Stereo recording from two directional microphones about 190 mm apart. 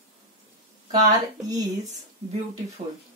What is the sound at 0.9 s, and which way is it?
Speech, 20° right (ahead or behind).